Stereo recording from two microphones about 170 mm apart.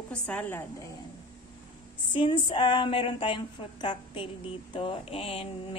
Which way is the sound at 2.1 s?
30° left (ahead or behind).